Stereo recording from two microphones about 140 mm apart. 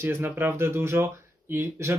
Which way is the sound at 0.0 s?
15° right (ahead or behind).